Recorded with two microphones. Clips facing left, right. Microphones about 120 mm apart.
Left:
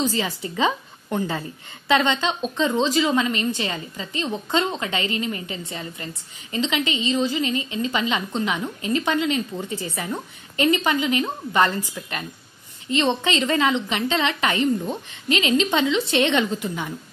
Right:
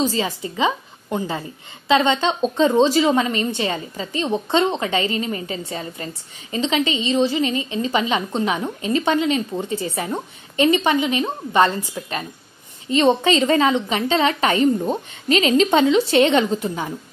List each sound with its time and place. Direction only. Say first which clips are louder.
0.0 s a woman's voice: right 3 dB; 25° right (ahead or behind)
12.9 s a woman's voice: right 5 dB; 40° right (ahead or behind)